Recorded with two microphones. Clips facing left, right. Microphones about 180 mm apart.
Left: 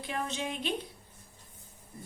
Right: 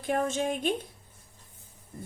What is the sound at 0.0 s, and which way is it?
Speech, 50° right (ahead or behind).